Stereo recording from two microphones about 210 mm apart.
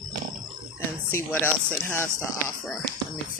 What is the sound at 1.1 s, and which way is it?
Speech, 10° left (ahead or behind).